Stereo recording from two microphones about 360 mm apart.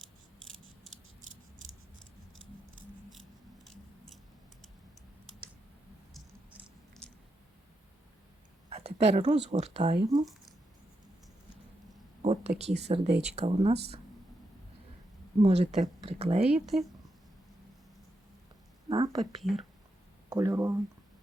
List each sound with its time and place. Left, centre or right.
3.1 s scissors: centre
9.0 s speech: centre
12.2 s speech: centre
15.4 s speech: centre
16.6 s speech: centre
18.9 s a sound: centre
19.3 s speech: centre